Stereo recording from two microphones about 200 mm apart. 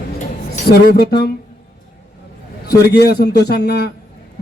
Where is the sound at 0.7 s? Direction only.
50° left (ahead or behind).